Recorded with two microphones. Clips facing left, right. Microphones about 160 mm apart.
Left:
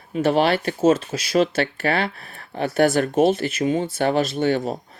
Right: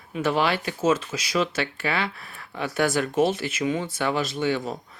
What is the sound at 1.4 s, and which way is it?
Speech, 60° left (ahead or behind).